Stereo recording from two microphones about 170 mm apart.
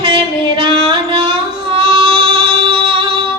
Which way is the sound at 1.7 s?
30° right (ahead or behind).